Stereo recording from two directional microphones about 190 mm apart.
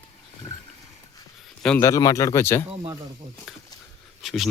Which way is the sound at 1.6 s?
10° left (ahead or behind).